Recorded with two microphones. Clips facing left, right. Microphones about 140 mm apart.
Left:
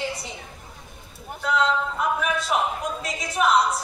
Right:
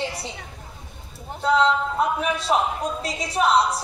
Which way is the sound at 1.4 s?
30° right (ahead or behind).